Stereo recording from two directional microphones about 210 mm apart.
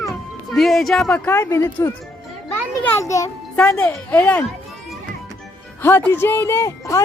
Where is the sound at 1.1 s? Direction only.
10° left (ahead or behind).